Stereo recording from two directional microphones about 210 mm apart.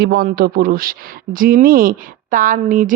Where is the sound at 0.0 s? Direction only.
50° right (ahead or behind).